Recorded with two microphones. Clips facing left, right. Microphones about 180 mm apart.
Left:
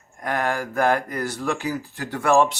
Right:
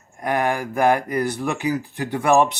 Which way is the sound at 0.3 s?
15° right (ahead or behind).